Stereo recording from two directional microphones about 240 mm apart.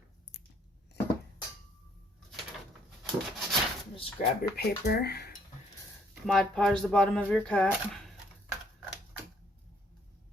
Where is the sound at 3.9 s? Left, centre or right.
Left.